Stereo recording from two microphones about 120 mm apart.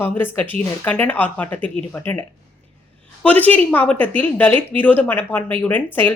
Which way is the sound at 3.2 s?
15° left (ahead or behind).